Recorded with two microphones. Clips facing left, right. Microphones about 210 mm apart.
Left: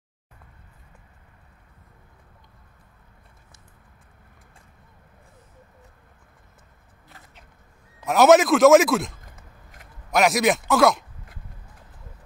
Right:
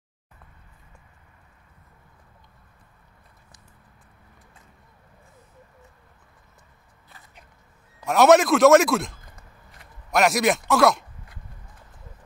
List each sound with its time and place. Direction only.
8.0 s a man's voice: centre (ahead or behind)